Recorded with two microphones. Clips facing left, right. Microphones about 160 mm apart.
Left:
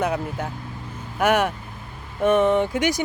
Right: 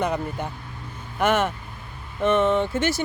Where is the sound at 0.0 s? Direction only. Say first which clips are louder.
Left 1 dB; 5° left (ahead or behind).